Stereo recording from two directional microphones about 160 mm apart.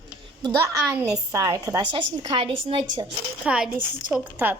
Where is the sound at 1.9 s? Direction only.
35° right (ahead or behind).